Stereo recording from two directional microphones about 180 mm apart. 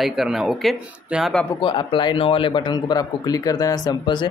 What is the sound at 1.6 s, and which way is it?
A man's voice, 25° left (ahead or behind).